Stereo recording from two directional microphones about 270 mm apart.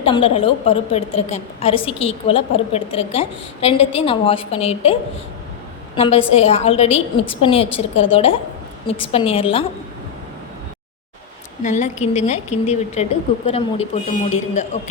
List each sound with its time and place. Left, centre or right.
0.0 s a woman's voice: centre
6.0 s a woman's voice: left
11.6 s a woman's voice: left